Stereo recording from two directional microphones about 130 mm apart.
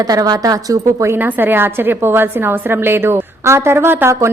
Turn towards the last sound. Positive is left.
turn(degrees=-20)  # may be behind; listen again after turning